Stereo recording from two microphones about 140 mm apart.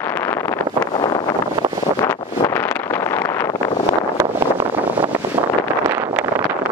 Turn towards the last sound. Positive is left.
turn(degrees=-15)  # may be behind; listen again after turning